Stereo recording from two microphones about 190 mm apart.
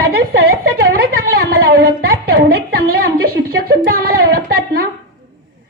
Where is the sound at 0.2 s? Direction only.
50° right (ahead or behind).